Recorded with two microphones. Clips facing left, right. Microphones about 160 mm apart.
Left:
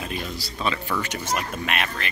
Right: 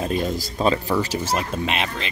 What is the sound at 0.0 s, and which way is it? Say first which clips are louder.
Speech: right 8 dB; 40° right (ahead or behind).